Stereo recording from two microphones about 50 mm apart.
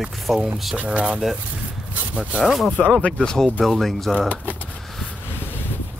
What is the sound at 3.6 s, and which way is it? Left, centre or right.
Speech, centre.